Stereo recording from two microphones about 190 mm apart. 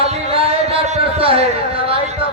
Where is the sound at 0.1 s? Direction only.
30° right (ahead or behind).